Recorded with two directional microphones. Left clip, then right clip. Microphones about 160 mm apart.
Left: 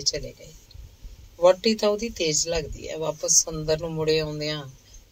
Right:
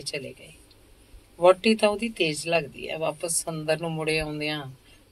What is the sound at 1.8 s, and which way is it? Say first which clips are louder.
A man's voice: even; 55° left (ahead or behind).